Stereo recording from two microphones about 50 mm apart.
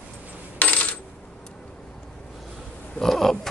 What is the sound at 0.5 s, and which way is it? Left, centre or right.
Coin, left.